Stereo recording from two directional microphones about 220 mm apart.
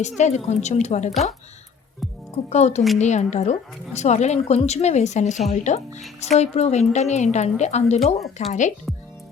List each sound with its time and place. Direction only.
0.2 s a woman's voice: 30° left (ahead or behind)
2.3 s a woman's voice: 30° left (ahead or behind)
7.9 s speech: centre (ahead or behind)
8.4 s a woman's voice: 35° left (ahead or behind)